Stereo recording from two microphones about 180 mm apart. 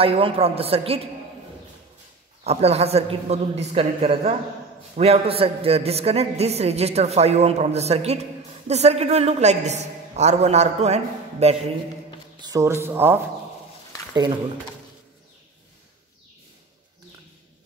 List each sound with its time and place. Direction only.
0.0 s a man's voice: 30° right (ahead or behind)
2.4 s a man's voice: 35° right (ahead or behind)
12.4 s speech: 20° right (ahead or behind)